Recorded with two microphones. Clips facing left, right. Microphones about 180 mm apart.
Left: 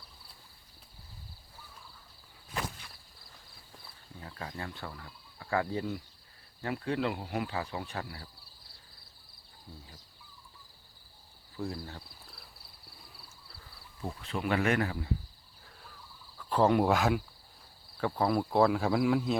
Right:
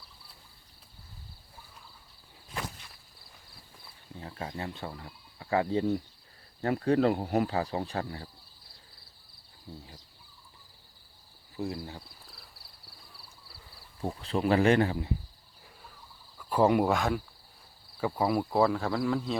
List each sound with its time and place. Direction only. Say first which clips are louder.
4.2 s speech: right 4 dB; 25° right (ahead or behind)
6.6 s cricket: right 7 dB; 40° right (ahead or behind)
9.7 s speech: right 5 dB; 25° right (ahead or behind)
11.5 s speech: right 3 dB; 20° right (ahead or behind)
11.9 s cricket: right 1 dB; centre (ahead or behind)
14.0 s cricket: right 5 dB; 35° right (ahead or behind)
16.4 s speech: right 1 dB; 10° right (ahead or behind)
18.0 s cricket: right 1 dB; 10° right (ahead or behind)